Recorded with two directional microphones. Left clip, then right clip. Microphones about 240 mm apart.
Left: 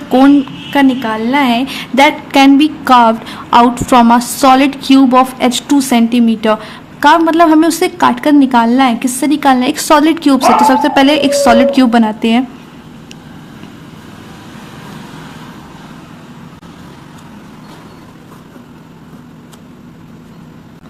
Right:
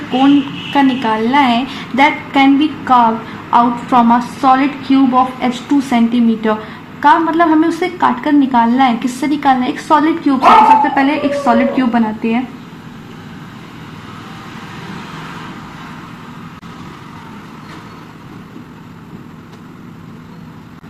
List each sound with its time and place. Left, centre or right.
0.7 s a woman's voice: left